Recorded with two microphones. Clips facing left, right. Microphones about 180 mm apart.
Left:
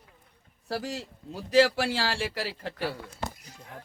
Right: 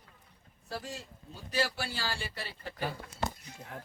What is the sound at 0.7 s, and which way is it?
Speech, 90° left.